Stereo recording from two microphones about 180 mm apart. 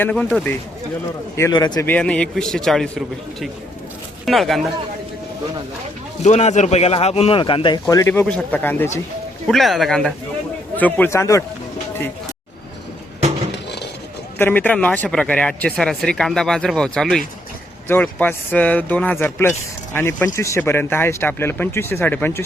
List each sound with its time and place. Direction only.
0.0 s a man's voice: 5° left (ahead or behind)
1.4 s speech: 20° left (ahead or behind)
1.9 s a man's voice: 5° left (ahead or behind)
4.3 s a man's voice: centre (ahead or behind)
6.2 s a man's voice: 40° left (ahead or behind); by 11.4 s 15° left (ahead or behind)
14.3 s a man's voice: 10° left (ahead or behind)